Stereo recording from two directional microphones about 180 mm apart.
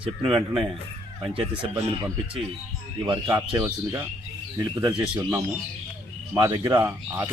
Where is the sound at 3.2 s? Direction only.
20° right (ahead or behind).